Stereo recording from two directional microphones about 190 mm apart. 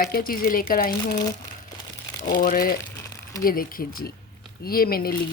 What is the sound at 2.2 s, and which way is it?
Speech, 45° left (ahead or behind).